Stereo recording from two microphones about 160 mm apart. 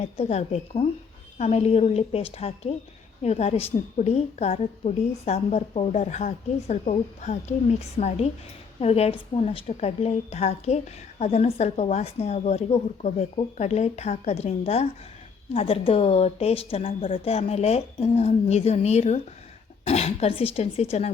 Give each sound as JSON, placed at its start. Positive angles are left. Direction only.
{"t": 0.0, "sound": "a woman's voice", "side_deg": 45}